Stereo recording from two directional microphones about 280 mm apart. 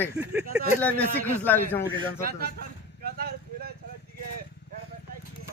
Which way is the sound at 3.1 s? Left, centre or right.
Right.